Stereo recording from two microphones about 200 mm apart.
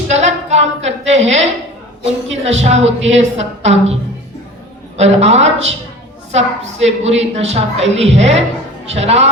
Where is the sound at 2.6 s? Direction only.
35° right (ahead or behind).